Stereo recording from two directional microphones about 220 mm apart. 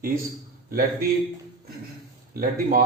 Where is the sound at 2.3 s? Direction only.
40° right (ahead or behind).